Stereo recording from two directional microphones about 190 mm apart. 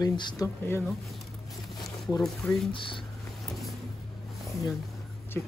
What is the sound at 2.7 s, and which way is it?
Speech, 25° left (ahead or behind).